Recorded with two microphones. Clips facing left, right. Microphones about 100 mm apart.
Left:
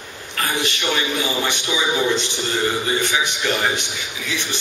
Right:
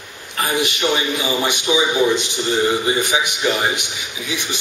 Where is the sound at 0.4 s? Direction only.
15° right (ahead or behind).